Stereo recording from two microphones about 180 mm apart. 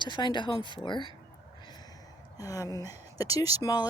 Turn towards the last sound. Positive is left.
turn(degrees=20)  # may be behind; listen again after turning